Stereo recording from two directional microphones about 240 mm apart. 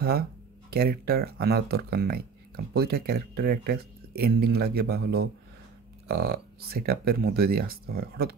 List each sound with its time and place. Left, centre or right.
0.0 s speech: right